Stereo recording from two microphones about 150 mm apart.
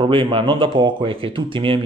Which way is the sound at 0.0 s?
35° right (ahead or behind).